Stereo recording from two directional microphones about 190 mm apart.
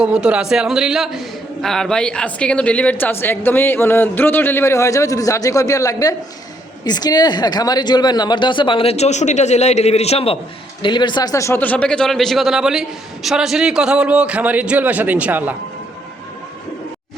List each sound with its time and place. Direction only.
0.0 s a man's voice: 5° right (ahead or behind)